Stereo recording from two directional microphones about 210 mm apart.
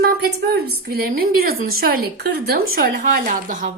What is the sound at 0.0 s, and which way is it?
Speech, 50° right (ahead or behind).